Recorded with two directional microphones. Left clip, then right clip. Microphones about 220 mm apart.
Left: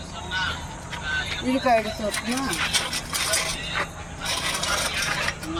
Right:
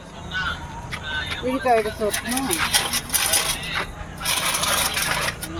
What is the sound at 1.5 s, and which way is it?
Speech, 50° left (ahead or behind).